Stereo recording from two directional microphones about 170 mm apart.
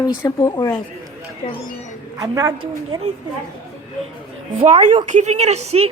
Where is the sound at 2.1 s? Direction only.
20° right (ahead or behind).